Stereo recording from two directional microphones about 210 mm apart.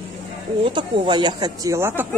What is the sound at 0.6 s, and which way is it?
Speech, 20° right (ahead or behind).